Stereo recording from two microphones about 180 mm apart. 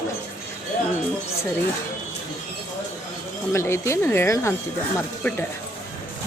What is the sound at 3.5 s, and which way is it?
A woman's voice, 15° left (ahead or behind).